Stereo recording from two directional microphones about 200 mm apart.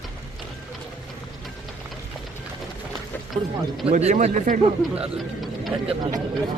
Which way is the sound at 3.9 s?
40° right (ahead or behind).